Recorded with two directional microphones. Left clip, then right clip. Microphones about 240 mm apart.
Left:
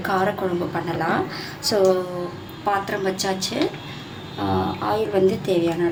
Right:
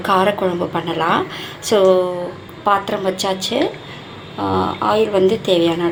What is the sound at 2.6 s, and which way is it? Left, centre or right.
A woman's voice, centre.